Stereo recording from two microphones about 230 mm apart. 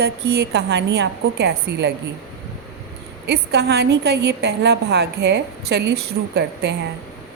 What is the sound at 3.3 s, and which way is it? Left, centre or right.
A woman's voice, right.